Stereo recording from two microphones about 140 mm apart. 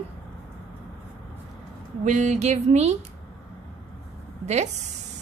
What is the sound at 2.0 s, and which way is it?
Speech, 60° right (ahead or behind).